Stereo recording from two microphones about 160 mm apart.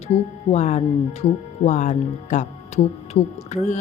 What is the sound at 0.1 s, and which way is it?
Speech, 45° left (ahead or behind).